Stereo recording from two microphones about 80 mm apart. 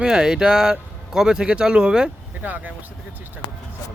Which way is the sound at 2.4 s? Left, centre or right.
Right.